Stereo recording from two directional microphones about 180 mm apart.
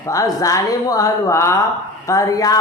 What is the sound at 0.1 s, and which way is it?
A man's voice, 20° left (ahead or behind).